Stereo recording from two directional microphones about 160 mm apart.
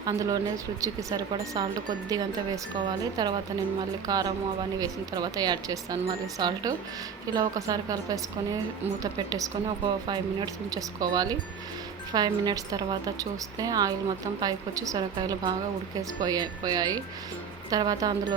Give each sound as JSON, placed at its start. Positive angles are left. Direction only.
{"t": 0.0, "sound": "a woman's voice", "side_deg": -25}